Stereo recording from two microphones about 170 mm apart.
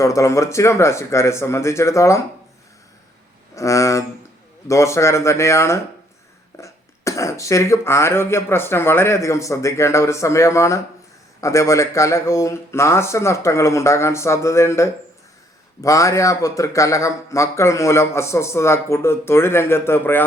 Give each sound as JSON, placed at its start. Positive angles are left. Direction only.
{"t": 0.0, "sound": "speech", "side_deg": 20}
{"t": 3.5, "sound": "a sound", "side_deg": 20}
{"t": 4.7, "sound": "speech", "side_deg": 15}